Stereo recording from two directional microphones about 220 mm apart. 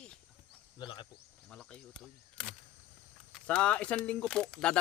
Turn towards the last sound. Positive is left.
turn(degrees=5)  # may be behind; listen again after turning